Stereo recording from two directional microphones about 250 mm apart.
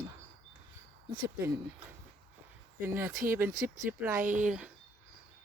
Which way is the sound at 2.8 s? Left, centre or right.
Centre.